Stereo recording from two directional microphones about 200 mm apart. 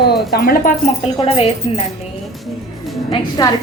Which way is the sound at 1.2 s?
30° left (ahead or behind).